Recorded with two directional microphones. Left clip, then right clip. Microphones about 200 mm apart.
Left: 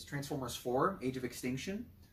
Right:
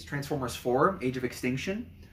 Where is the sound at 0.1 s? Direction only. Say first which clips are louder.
Right 8 dB; 15° right (ahead or behind).